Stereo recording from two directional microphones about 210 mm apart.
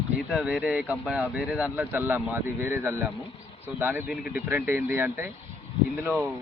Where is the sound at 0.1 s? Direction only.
5° right (ahead or behind).